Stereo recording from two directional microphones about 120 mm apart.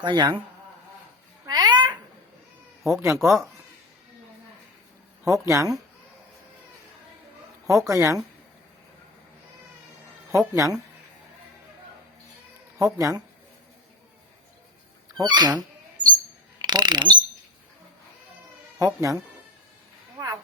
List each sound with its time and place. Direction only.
0.0 s a man's voice: 40° right (ahead or behind)
1.5 s babbling: 35° right (ahead or behind)
2.8 s speech: 25° right (ahead or behind)
5.2 s speech: 25° right (ahead or behind)
7.8 s speech: 25° right (ahead or behind)
10.3 s speech: 30° right (ahead or behind)
12.8 s speech: 30° right (ahead or behind)
15.2 s a man's voice: 35° right (ahead or behind)
16.0 s a sound: 10° right (ahead or behind)
16.6 s ratchet: 35° right (ahead or behind)
18.8 s speech: 30° right (ahead or behind)
20.1 s a sound: 25° right (ahead or behind)